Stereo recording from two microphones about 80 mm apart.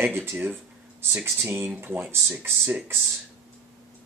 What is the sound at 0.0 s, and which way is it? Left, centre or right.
Speech, right.